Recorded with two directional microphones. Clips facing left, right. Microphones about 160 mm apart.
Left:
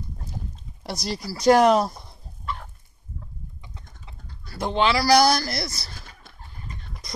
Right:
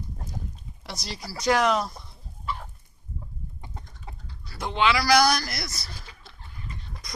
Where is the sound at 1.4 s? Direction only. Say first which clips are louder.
Left 6 dB; 40° left (ahead or behind).